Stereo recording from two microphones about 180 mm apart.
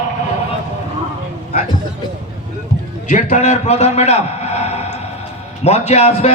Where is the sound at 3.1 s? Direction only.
40° left (ahead or behind).